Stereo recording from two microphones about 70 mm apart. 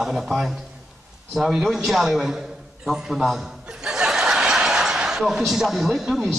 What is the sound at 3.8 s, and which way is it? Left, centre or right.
Chuckle, centre.